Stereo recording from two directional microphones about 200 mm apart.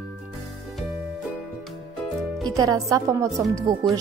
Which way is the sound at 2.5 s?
20° right (ahead or behind).